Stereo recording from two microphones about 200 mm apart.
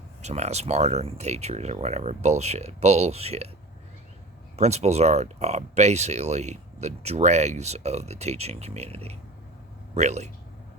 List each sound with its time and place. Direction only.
0.2 s speech: 35° right (ahead or behind)
4.5 s speech: 35° right (ahead or behind)